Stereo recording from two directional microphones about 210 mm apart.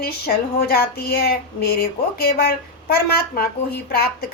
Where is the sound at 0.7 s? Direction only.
45° left (ahead or behind).